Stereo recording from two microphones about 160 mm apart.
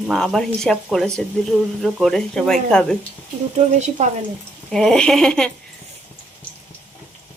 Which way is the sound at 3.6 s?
45° right (ahead or behind).